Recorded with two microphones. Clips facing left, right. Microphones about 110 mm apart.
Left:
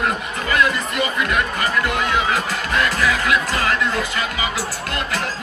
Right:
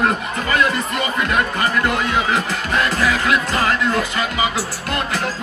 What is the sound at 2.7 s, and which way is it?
Speech, 25° right (ahead or behind).